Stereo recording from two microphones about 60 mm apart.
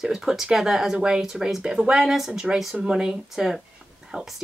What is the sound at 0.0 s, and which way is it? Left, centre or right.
Speech, centre.